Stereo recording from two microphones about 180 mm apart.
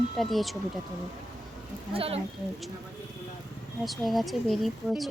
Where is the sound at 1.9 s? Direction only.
30° right (ahead or behind).